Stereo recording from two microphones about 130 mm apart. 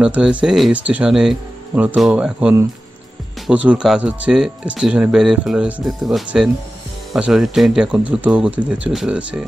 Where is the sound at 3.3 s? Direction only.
Centre (ahead or behind).